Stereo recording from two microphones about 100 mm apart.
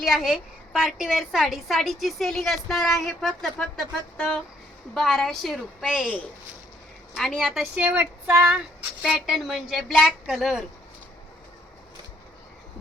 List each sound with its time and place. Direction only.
0.0 s a woman's voice: centre (ahead or behind)
7.2 s a woman's voice: centre (ahead or behind); by 8.4 s 20° right (ahead or behind)
9.0 s a woman's voice: 5° right (ahead or behind)